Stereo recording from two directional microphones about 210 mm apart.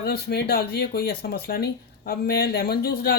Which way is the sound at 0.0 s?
50° left (ahead or behind).